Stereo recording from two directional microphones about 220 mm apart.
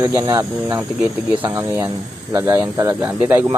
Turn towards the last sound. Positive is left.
turn(degrees=-10)  # may be behind; listen again after turning